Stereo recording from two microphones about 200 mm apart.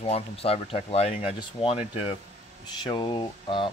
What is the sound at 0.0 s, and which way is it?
Speech, 30° left (ahead or behind).